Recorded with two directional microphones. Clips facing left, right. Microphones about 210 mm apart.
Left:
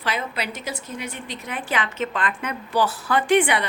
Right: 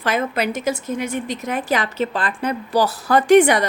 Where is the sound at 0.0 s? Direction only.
45° right (ahead or behind).